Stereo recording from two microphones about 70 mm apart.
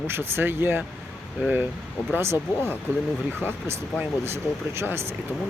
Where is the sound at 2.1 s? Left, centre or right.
Right.